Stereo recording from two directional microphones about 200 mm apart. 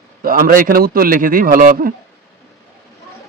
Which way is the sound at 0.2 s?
45° right (ahead or behind).